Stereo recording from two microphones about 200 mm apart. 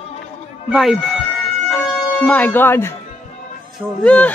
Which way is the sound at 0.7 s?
Centre (ahead or behind).